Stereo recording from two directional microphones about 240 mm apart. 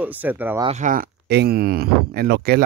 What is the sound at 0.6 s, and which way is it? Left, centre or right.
Speech, right.